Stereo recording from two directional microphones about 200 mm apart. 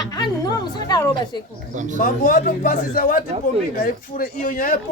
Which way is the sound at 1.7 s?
35° right (ahead or behind).